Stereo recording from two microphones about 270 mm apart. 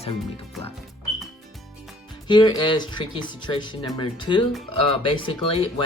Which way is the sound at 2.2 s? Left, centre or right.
Centre.